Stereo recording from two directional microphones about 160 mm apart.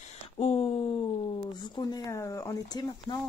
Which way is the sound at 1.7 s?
25° left (ahead or behind).